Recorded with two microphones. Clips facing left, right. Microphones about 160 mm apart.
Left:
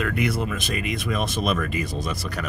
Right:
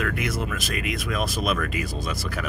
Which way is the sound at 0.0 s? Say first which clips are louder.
Left 3 dB; centre (ahead or behind).